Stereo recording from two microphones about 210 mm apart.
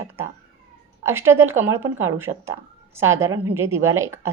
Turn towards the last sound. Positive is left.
turn(degrees=-10)  # may be behind; listen again after turning